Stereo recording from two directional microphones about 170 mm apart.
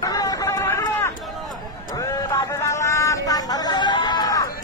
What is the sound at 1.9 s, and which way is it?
Vehicle, 20° left (ahead or behind).